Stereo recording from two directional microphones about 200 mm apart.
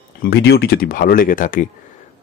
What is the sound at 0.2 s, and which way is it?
Speech, 55° left (ahead or behind).